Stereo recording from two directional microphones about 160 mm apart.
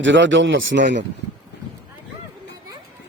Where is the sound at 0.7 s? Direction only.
85° right.